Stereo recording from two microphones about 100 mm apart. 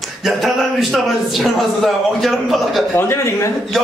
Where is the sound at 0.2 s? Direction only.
Centre (ahead or behind).